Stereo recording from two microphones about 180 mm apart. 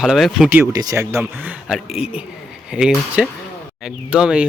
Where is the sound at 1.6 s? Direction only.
5° right (ahead or behind).